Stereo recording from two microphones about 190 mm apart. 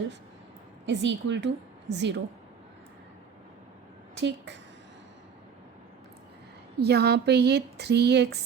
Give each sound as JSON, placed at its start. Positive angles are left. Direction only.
{"t": 0.9, "sound": "a woman's voice", "side_deg": -65}
{"t": 6.7, "sound": "speech", "side_deg": -60}